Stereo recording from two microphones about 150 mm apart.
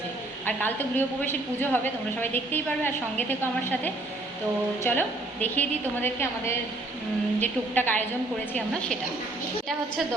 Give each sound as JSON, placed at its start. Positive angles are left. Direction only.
{"t": 0.4, "sound": "a woman's voice", "side_deg": 15}
{"t": 7.3, "sound": "a woman's voice", "side_deg": 10}